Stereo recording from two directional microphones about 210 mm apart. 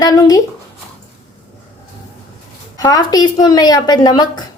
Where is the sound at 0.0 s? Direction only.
20° left (ahead or behind).